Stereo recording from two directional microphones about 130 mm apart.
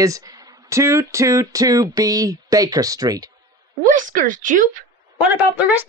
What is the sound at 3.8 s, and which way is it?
Speech, 90° right.